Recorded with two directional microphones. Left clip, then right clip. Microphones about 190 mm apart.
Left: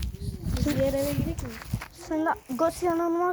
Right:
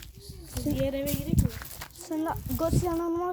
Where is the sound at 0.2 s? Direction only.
Centre (ahead or behind).